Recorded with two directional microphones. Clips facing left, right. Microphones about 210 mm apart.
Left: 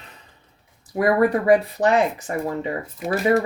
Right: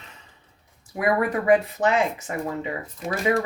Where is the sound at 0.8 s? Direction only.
35° left (ahead or behind).